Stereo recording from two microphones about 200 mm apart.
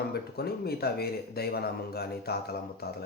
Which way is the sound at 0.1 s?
50° left (ahead or behind).